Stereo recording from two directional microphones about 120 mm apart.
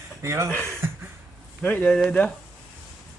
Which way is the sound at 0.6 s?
20° right (ahead or behind).